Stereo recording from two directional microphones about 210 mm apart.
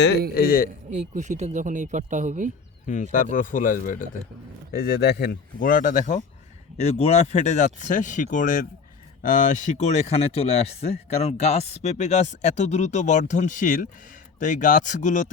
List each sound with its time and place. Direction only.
0.3 s speech: 45° left (ahead or behind)
0.9 s speech: 35° right (ahead or behind)
2.8 s speech: 35° left (ahead or behind)